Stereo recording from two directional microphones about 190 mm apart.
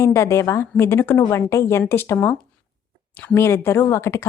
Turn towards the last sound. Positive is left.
turn(degrees=15)  # may be behind; listen again after turning